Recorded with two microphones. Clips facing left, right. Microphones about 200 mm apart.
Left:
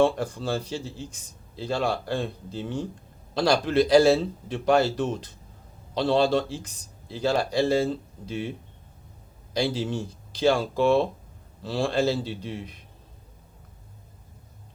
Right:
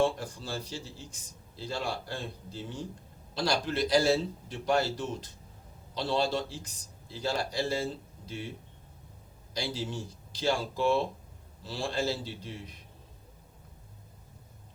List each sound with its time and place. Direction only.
0.0 s a man's voice: 70° left (ahead or behind)
3.3 s a man's voice: 65° left (ahead or behind)